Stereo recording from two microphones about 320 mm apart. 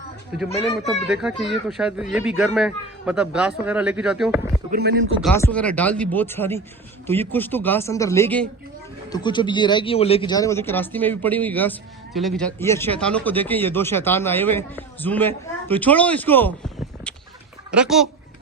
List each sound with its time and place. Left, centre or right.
1.1 s a man's voice: centre
4.7 s speech: right
5.2 s a man's voice: centre
17.7 s speech: centre